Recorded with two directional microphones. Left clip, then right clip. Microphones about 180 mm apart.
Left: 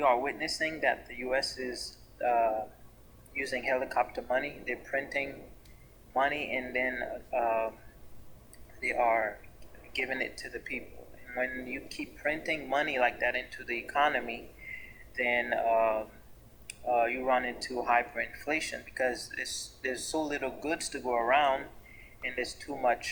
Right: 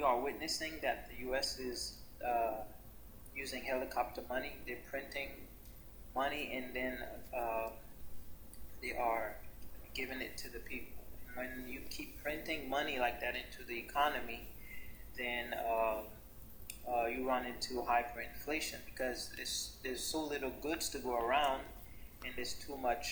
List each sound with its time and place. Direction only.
0.0 s speech: 40° left (ahead or behind)
8.8 s speech: 40° left (ahead or behind)